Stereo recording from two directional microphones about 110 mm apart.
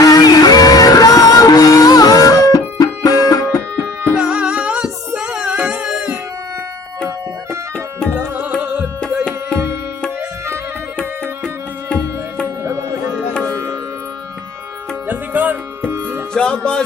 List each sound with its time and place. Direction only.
0.0 s music: 35° left (ahead or behind)
4.2 s music: 10° right (ahead or behind)
8.1 s music: 10° right (ahead or behind)
12.6 s music: 25° right (ahead or behind)
13.4 s sitar: 25° right (ahead or behind)
15.0 s music: 15° right (ahead or behind)
16.3 s music: 10° left (ahead or behind)